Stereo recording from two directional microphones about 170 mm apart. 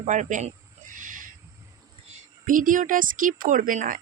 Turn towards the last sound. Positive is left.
turn(degrees=-50)  # may be behind; listen again after turning